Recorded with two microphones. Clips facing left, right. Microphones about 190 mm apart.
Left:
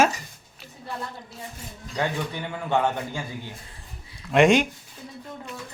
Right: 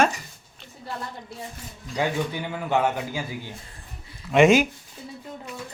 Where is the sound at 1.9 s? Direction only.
10° right (ahead or behind).